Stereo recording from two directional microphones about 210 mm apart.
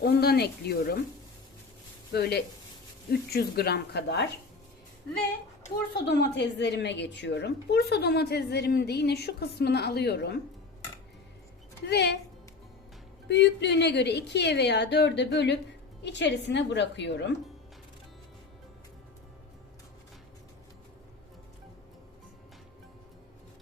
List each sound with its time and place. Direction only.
0.0 s a woman's voice: 50° left (ahead or behind)
2.1 s a woman's voice: 50° left (ahead or behind)
5.9 s a woman's voice: 50° left (ahead or behind)
11.9 s a woman's voice: 50° left (ahead or behind)
13.2 s a woman's voice: 55° left (ahead or behind)